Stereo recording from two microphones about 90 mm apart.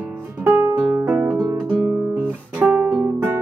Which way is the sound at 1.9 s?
20° right (ahead or behind).